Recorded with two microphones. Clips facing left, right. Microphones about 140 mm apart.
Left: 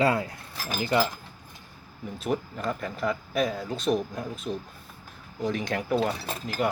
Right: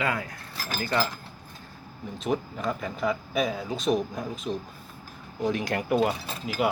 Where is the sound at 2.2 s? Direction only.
Centre (ahead or behind).